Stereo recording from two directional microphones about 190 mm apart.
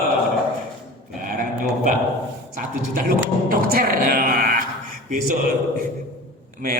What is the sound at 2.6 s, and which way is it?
A man's voice, 45° right (ahead or behind).